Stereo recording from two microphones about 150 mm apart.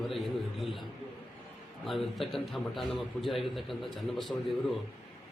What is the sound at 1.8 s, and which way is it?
A man's voice, centre (ahead or behind).